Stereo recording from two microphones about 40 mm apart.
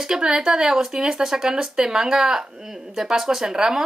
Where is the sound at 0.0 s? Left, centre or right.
Centre.